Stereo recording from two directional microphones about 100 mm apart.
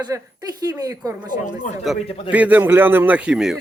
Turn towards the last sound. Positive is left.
turn(degrees=-5)  # may be behind; listen again after turning